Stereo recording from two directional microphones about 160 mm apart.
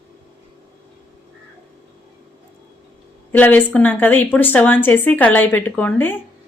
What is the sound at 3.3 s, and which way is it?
A woman's voice, 10° left (ahead or behind).